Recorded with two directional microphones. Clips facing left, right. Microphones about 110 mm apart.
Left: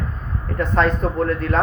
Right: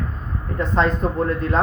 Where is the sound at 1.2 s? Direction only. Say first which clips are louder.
Left 1 dB; 25° right (ahead or behind).